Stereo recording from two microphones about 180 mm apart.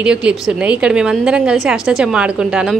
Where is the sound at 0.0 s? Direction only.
5° right (ahead or behind).